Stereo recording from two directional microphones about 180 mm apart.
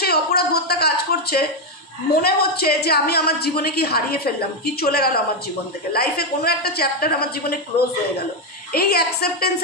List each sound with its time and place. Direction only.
0.0 s a sound: 60° left (ahead or behind)
2.2 s a woman's voice: 60° left (ahead or behind)
8.7 s a woman's voice: 60° left (ahead or behind)